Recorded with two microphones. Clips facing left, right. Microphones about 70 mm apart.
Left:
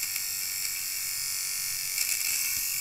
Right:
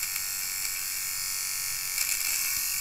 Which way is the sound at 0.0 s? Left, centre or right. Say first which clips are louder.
Right 2 dB; right.